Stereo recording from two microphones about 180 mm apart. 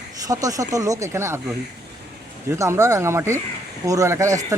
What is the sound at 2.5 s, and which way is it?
Speech, 15° right (ahead or behind).